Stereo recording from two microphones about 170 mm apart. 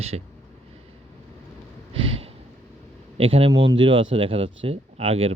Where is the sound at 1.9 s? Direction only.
35° right (ahead or behind).